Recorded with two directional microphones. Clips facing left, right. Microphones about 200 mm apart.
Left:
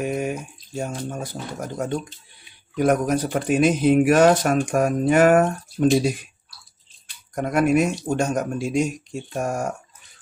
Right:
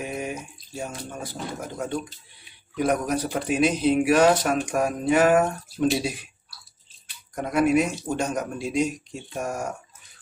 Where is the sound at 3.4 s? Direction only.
50° left (ahead or behind).